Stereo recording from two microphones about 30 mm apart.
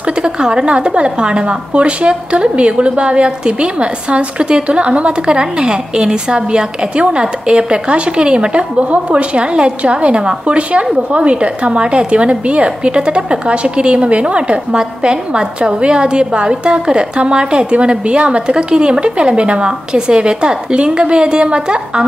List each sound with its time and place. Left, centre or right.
0.2 s a woman's voice: right
14.8 s a woman's voice: right